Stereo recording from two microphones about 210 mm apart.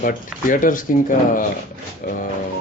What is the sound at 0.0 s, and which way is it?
Speech, 40° left (ahead or behind).